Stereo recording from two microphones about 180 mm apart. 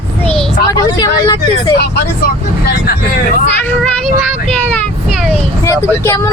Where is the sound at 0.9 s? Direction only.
20° left (ahead or behind).